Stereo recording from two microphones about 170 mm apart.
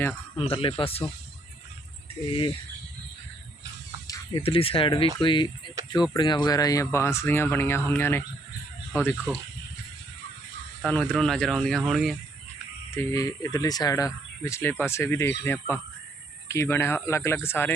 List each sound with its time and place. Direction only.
0.3 s speech: 35° left (ahead or behind)
2.2 s speech: 30° left (ahead or behind)
4.0 s a sound: 20° left (ahead or behind)
4.4 s speech: 30° left (ahead or behind); by 9.1 s 15° left (ahead or behind)
10.8 s speech: 5° left (ahead or behind)
12.9 s speech: 15° left (ahead or behind)